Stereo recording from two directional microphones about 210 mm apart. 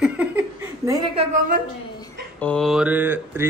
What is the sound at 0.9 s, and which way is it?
Speech, 20° right (ahead or behind).